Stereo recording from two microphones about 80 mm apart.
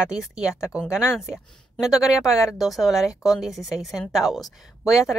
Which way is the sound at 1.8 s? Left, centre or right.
Centre.